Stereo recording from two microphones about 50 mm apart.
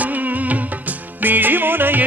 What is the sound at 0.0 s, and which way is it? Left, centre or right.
Music, right.